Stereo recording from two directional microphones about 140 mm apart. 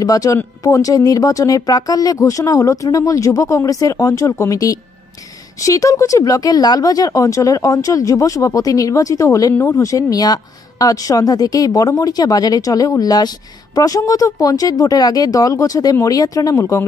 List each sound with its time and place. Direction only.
0.0 s speech: 25° left (ahead or behind)